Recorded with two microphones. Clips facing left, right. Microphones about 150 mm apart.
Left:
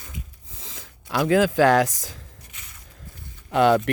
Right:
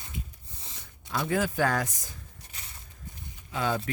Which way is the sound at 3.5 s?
75° left (ahead or behind).